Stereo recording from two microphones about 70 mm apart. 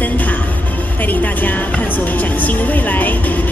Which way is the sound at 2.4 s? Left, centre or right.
Left.